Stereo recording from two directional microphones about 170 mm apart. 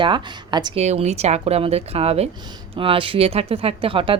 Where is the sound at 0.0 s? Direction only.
25° right (ahead or behind).